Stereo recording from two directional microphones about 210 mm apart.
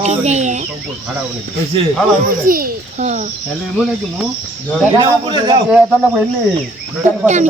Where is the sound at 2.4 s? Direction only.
45° right (ahead or behind).